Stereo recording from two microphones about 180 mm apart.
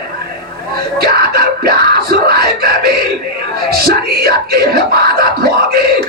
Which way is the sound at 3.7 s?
60° right (ahead or behind).